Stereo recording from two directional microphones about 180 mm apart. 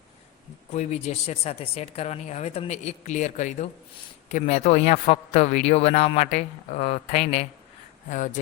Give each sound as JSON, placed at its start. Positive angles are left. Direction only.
{"t": 0.7, "sound": "a man's voice", "side_deg": 40}